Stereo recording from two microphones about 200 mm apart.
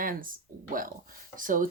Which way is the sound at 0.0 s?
45° right (ahead or behind).